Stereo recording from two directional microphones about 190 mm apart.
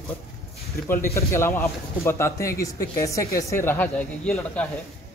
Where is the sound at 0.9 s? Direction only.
15° left (ahead or behind).